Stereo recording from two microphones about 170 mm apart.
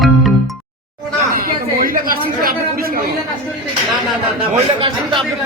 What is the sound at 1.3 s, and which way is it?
A woman's voice, 55° right (ahead or behind).